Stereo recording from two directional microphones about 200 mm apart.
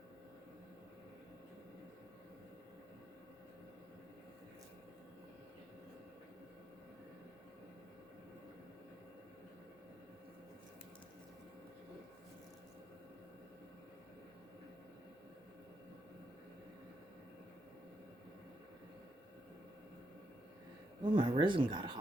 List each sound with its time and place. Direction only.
21.0 s speech: 25° right (ahead or behind)